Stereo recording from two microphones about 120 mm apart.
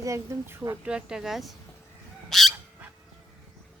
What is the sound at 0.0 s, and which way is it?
Speech, 25° right (ahead or behind).